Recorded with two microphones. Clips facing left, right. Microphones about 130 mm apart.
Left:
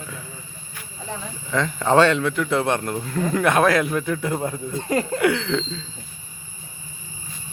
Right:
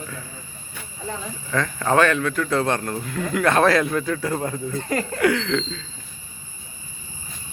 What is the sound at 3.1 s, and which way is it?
A man's voice, 25° left (ahead or behind).